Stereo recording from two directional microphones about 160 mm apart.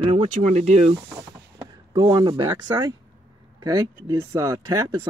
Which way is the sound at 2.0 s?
30° right (ahead or behind).